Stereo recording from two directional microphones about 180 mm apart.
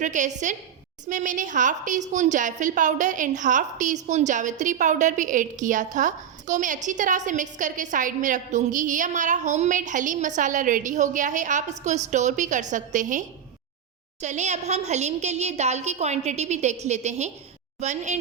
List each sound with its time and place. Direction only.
0.0 s a woman's voice: 40° right (ahead or behind)